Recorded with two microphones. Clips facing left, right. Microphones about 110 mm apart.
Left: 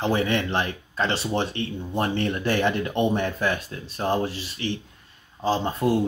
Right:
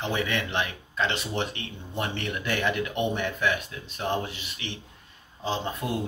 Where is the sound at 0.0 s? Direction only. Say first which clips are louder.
Left 5 dB; 35° left (ahead or behind).